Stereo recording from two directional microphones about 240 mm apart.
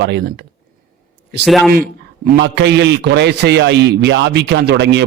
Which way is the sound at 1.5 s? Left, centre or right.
Centre.